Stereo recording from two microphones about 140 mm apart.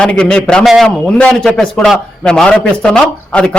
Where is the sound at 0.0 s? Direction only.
5° left (ahead or behind).